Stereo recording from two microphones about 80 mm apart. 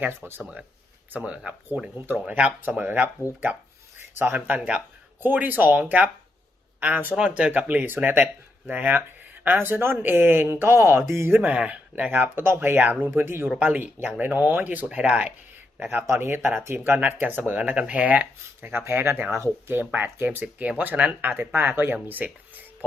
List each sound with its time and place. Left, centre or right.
0.2 s speech: right
4.2 s speech: right
11.3 s speech: centre